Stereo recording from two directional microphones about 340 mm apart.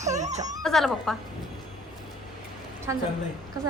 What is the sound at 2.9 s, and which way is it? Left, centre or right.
Speech, centre.